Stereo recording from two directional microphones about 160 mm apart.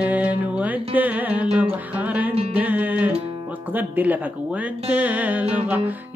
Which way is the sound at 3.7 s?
10° right (ahead or behind).